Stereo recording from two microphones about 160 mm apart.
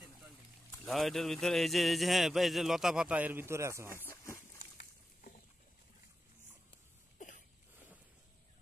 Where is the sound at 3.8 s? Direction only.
15° left (ahead or behind).